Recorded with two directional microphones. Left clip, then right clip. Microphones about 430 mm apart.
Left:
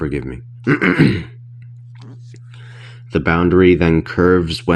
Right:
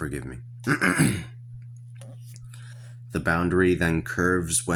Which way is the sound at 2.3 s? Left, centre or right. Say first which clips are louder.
Left 8 dB; right.